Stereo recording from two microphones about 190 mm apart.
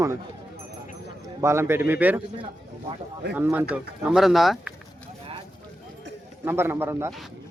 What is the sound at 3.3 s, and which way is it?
Speech, 10° right (ahead or behind).